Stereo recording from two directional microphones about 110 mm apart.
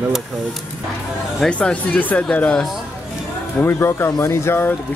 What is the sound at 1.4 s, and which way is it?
Speech, 10° left (ahead or behind).